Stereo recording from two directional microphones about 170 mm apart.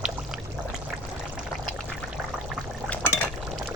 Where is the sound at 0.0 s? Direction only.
5° right (ahead or behind).